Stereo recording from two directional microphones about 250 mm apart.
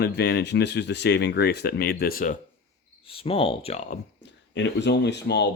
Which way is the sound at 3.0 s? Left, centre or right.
Left.